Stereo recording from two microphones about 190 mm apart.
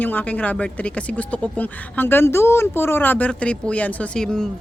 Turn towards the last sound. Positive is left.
turn(degrees=5)  # may be behind; listen again after turning